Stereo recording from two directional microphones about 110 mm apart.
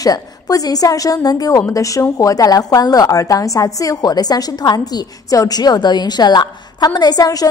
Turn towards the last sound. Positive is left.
turn(degrees=35)  # may be behind; listen again after turning